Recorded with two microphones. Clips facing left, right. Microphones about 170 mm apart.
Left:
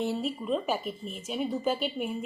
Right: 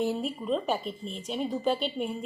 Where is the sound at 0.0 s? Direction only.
Centre (ahead or behind).